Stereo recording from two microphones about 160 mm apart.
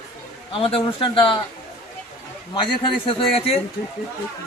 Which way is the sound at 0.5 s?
35° left (ahead or behind).